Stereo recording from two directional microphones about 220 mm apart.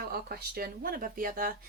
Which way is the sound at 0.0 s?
45° right (ahead or behind).